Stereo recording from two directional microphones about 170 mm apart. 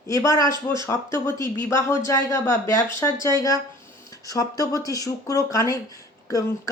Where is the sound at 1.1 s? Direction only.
25° right (ahead or behind).